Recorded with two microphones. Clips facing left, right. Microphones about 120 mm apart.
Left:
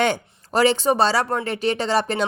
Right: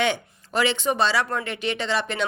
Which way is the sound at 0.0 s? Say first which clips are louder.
Left 3 dB; 40° left (ahead or behind).